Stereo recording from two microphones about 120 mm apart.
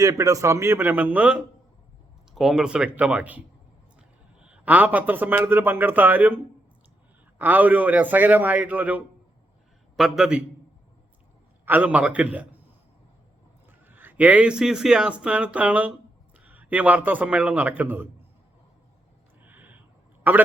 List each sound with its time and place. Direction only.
0.0 s a man's voice: 25° right (ahead or behind); by 10.4 s 5° right (ahead or behind)
11.6 s a man's voice: 15° right (ahead or behind)
13.7 s a man's voice: 15° right (ahead or behind)
19.4 s a sound: 15° right (ahead or behind)
20.3 s a man's voice: 15° right (ahead or behind)